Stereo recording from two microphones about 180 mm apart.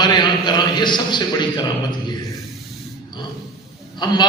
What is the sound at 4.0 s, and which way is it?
Speech, 25° left (ahead or behind).